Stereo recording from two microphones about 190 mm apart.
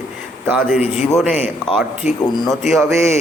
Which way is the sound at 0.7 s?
5° right (ahead or behind).